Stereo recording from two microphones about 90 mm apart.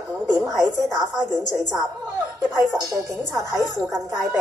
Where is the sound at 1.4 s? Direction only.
45° left (ahead or behind).